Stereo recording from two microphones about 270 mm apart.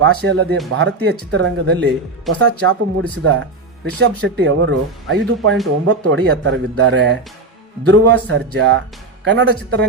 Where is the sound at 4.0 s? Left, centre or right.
Right.